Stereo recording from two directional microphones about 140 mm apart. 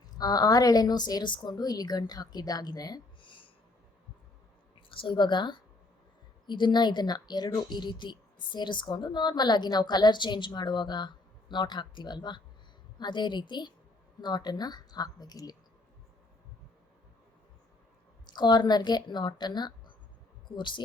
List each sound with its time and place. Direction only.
0.2 s a woman's voice: 30° left (ahead or behind)
4.9 s a woman's voice: 35° left (ahead or behind)
18.3 s speech: 30° left (ahead or behind)